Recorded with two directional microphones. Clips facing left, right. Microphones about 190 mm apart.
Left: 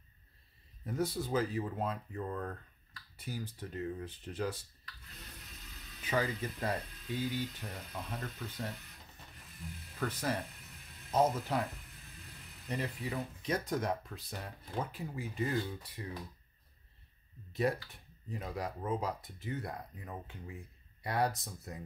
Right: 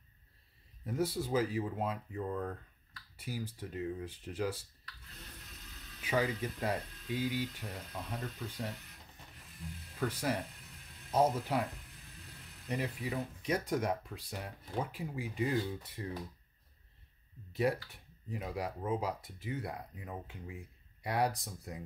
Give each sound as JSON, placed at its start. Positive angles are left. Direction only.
{"t": 0.8, "sound": "speech", "side_deg": -10}
{"t": 6.0, "sound": "speech", "side_deg": -10}
{"t": 9.9, "sound": "speech", "side_deg": -10}
{"t": 12.6, "sound": "speech", "side_deg": -10}
{"t": 16.0, "sound": "speech", "side_deg": -30}
{"t": 17.5, "sound": "a sound", "side_deg": -10}
{"t": 18.3, "sound": "speech", "side_deg": -10}